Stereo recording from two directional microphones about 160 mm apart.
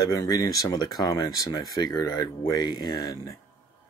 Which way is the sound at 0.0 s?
20° left (ahead or behind).